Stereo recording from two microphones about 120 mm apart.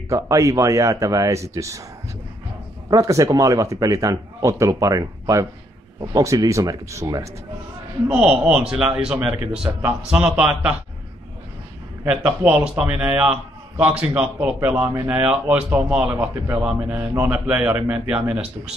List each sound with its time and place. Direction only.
0.1 s speech: 25° right (ahead or behind)
2.9 s speech: 30° right (ahead or behind)
8.1 s a man's voice: 5° right (ahead or behind)
12.0 s a man's voice: 15° right (ahead or behind)